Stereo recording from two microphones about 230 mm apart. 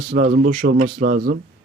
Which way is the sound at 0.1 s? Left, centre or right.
Right.